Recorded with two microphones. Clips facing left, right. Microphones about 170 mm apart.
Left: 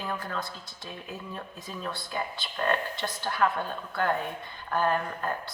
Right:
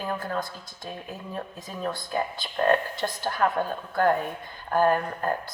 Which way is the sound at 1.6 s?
40° right (ahead or behind).